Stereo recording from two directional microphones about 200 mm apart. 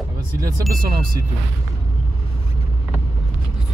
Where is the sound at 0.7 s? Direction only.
45° right (ahead or behind).